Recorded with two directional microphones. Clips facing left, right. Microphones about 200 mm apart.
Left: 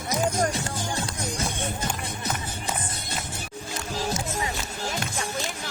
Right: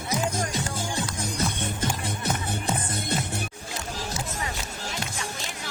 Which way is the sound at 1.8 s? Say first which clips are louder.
Right 2 dB; 60° right (ahead or behind).